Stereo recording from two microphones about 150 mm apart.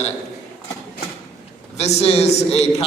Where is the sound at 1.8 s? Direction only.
45° left (ahead or behind).